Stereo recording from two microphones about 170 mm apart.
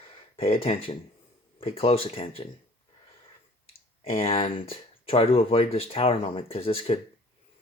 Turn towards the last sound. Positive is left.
turn(degrees=35)  # may be behind; listen again after turning